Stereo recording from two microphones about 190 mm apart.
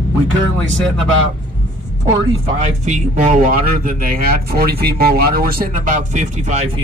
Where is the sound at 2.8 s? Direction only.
40° right (ahead or behind).